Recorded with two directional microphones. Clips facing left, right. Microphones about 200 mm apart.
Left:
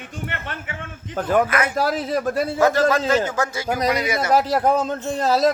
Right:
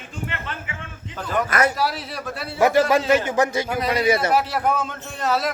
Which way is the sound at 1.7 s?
50° left (ahead or behind).